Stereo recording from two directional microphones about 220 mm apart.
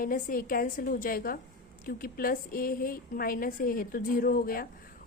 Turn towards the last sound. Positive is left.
turn(degrees=40)  # may be behind; listen again after turning